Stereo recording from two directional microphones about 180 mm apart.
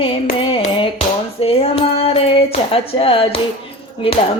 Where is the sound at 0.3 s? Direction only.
30° left (ahead or behind).